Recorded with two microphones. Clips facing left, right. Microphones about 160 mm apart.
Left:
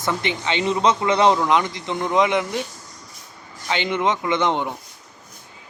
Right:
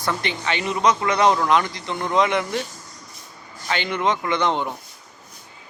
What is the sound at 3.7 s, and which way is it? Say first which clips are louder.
Speech: left 1 dB; 20° left (ahead or behind).